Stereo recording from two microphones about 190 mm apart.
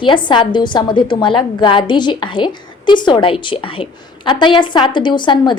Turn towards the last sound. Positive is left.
turn(degrees=25)  # may be behind; listen again after turning